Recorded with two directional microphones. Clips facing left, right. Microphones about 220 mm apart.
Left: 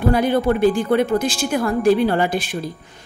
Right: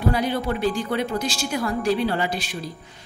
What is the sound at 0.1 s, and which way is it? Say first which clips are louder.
A woman's voice: left 7 dB; 50° left (ahead or behind).